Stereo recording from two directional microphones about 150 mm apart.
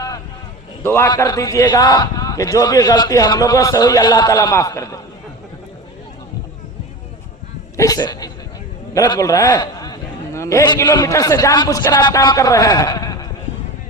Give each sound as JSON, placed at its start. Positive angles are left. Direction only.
{"t": 0.8, "sound": "a man's voice", "side_deg": 15}
{"t": 7.8, "sound": "a man's voice", "side_deg": 25}